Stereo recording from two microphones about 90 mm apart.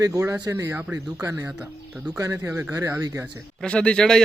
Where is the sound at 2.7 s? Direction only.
40° right (ahead or behind).